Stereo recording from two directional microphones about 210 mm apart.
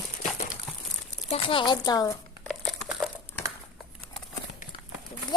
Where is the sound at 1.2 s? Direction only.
25° left (ahead or behind).